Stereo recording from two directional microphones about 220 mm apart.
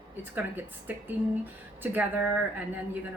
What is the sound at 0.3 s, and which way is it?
A woman's voice, 10° right (ahead or behind).